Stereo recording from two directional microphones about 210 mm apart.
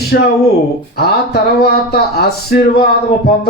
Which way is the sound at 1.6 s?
50° left (ahead or behind).